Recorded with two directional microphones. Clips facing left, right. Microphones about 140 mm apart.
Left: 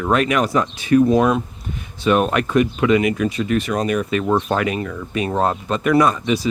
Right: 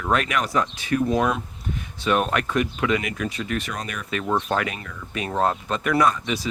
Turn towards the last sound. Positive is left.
turn(degrees=20)  # may be behind; listen again after turning